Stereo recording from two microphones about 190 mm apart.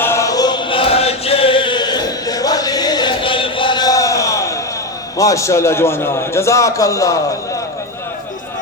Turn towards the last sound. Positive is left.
turn(degrees=15)  # may be behind; listen again after turning